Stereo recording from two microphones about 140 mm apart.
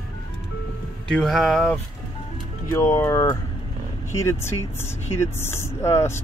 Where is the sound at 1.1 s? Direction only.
Centre (ahead or behind).